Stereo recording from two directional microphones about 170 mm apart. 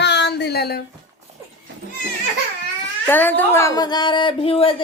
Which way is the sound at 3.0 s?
10° left (ahead or behind).